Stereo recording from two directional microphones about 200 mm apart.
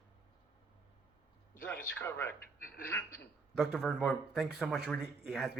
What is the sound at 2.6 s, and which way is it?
Speech, 45° left (ahead or behind).